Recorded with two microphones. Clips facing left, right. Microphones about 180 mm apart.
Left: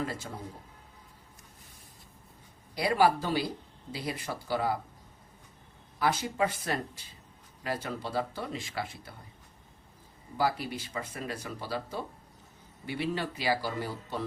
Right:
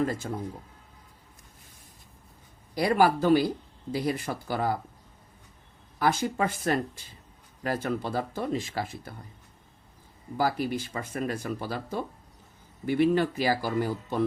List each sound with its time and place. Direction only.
2.7 s speech: 50° right (ahead or behind)
6.0 s speech: 50° right (ahead or behind)
10.3 s speech: 50° right (ahead or behind)